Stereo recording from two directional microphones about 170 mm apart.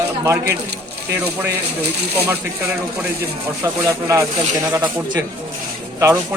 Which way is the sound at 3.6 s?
20° right (ahead or behind).